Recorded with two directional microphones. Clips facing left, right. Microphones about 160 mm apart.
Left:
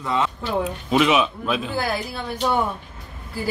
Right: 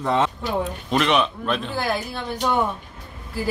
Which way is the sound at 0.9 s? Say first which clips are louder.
Left 2 dB; 5° left (ahead or behind).